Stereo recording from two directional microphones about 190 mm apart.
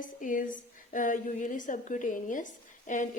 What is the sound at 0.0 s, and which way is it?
Speech, 45° left (ahead or behind).